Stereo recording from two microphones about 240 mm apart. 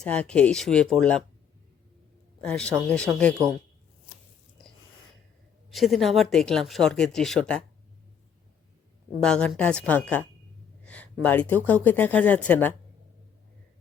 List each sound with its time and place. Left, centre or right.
0.0 s speech: centre
2.4 s speech: centre
5.7 s speech: centre
9.2 s speech: centre